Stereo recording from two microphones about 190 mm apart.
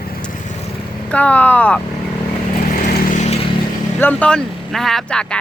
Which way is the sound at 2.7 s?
45° left (ahead or behind).